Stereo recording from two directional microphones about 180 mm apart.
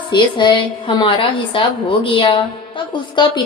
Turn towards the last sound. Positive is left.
turn(degrees=25)  # may be behind; listen again after turning